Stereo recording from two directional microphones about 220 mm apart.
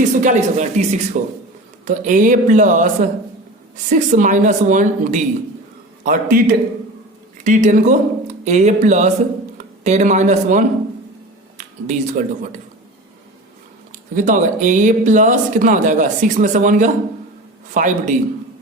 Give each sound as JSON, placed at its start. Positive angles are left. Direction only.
{"t": 0.2, "sound": "speech", "side_deg": -35}
{"t": 7.4, "sound": "a man's voice", "side_deg": -35}
{"t": 14.2, "sound": "speech", "side_deg": -35}